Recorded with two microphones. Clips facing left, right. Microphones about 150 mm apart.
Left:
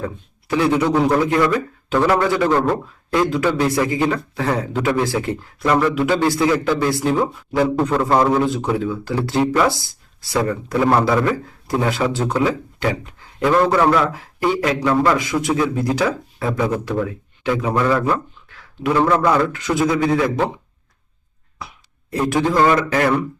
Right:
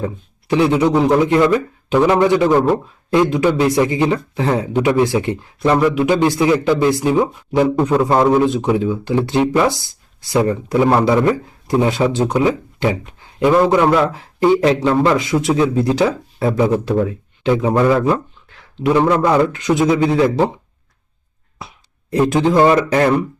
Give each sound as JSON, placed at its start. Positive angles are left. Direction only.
{"t": 0.0, "sound": "speech", "side_deg": -20}
{"t": 22.1, "sound": "speech", "side_deg": -20}